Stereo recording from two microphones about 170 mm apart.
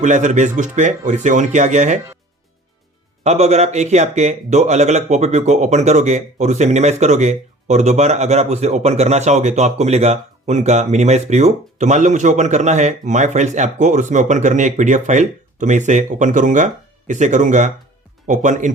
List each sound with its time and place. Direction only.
0.0 s a man's voice: 45° right (ahead or behind)
3.2 s a man's voice: 40° right (ahead or behind)